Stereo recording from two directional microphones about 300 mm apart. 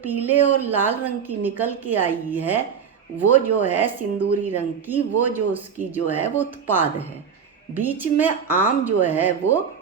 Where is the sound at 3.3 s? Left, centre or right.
Left.